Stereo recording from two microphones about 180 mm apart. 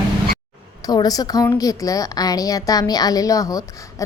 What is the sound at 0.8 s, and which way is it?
A woman's voice, 20° left (ahead or behind).